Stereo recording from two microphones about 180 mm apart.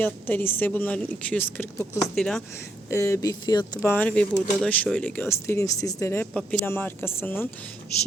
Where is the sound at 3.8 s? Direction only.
10° left (ahead or behind).